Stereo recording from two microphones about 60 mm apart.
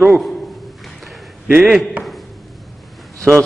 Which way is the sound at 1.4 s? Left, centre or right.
Centre.